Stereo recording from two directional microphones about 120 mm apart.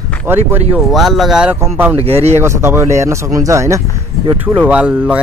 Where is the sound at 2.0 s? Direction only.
55° right (ahead or behind).